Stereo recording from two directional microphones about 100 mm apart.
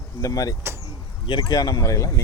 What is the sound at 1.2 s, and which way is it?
Speech, 45° left (ahead or behind).